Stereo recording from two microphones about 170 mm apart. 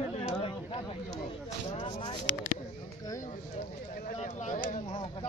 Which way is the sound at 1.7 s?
30° left (ahead or behind).